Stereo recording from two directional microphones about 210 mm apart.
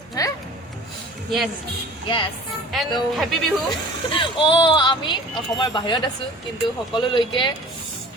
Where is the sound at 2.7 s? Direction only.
Centre (ahead or behind).